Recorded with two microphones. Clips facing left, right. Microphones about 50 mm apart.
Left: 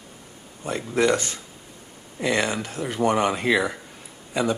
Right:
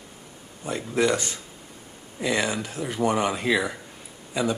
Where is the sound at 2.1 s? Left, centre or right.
Centre.